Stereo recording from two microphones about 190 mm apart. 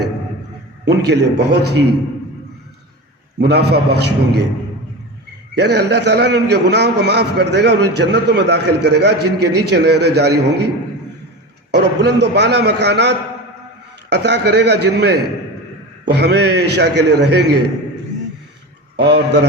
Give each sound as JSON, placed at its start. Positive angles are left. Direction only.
{"t": 0.9, "sound": "a man's voice", "side_deg": -60}
{"t": 3.3, "sound": "a man's voice", "side_deg": -60}
{"t": 5.5, "sound": "a man's voice", "side_deg": -60}
{"t": 11.7, "sound": "a man's voice", "side_deg": -65}
{"t": 18.9, "sound": "a man's voice", "side_deg": -65}